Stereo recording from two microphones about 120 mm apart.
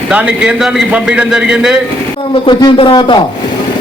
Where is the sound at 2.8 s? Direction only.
45° left (ahead or behind).